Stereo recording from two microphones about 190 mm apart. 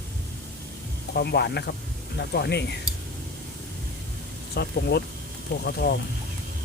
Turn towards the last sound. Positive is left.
turn(degrees=55)  # may be behind; listen again after turning